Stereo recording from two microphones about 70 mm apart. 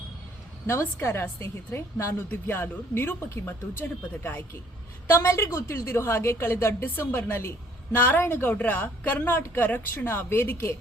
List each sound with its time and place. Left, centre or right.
1.0 s a woman's voice: left
5.0 s a woman's voice: left